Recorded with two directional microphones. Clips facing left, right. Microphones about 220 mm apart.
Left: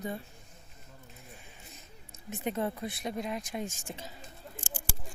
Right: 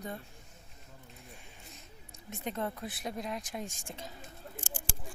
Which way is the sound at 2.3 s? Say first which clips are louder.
Left 4 dB; 5° left (ahead or behind).